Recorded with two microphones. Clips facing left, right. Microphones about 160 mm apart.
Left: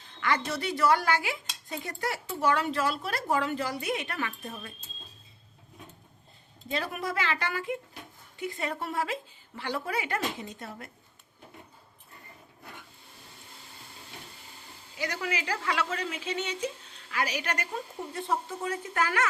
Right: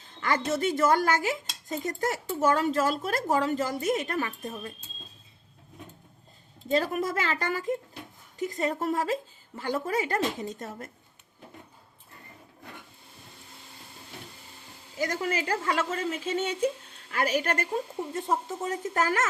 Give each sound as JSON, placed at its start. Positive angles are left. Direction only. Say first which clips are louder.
{"t": 0.2, "sound": "speech", "louder": "right 3 dB", "side_deg": -45}
{"t": 6.7, "sound": "speech", "louder": "right 6 dB", "side_deg": -40}
{"t": 14.9, "sound": "speech", "louder": "right 4 dB", "side_deg": -45}